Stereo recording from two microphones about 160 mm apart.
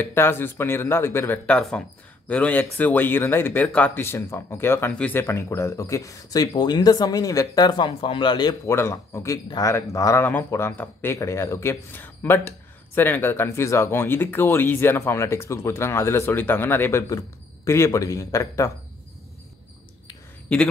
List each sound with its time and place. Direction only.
0.0 s a man's voice: 15° left (ahead or behind)